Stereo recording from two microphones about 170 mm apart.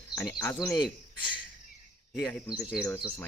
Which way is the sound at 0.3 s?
20° left (ahead or behind).